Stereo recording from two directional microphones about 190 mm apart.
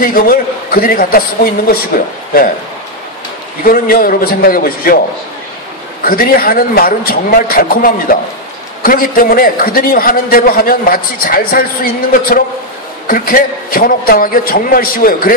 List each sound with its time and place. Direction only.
0.0 s a man's voice: 50° left (ahead or behind)
3.6 s a man's voice: 50° left (ahead or behind)
6.0 s a man's voice: 50° left (ahead or behind)